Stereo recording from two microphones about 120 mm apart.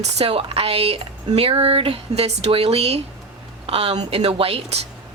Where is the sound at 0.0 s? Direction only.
55° right (ahead or behind).